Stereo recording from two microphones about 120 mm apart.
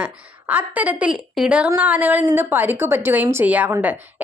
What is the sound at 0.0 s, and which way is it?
A woman's voice, 15° right (ahead or behind).